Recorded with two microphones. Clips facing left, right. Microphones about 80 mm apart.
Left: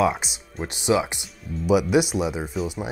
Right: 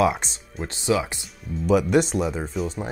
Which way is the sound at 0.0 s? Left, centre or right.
Centre.